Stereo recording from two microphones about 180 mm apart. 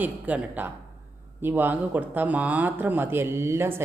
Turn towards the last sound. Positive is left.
turn(degrees=-15)  # may be behind; listen again after turning